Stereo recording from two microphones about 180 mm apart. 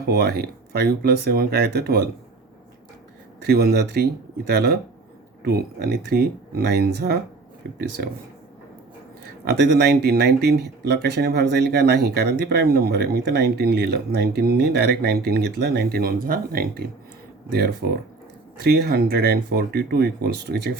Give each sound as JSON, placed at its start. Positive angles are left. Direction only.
{"t": 0.1, "sound": "speech", "side_deg": -60}
{"t": 3.4, "sound": "speech", "side_deg": -60}
{"t": 9.2, "sound": "speech", "side_deg": -65}